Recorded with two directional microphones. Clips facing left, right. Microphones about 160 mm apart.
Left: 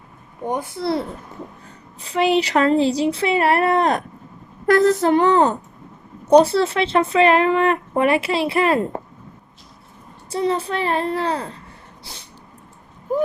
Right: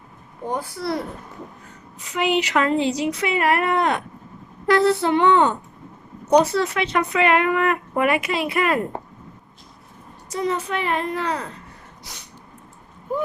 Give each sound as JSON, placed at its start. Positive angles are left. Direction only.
{"t": 0.5, "sound": "a woman's voice", "side_deg": 25}
{"t": 10.2, "sound": "a woman's voice", "side_deg": 30}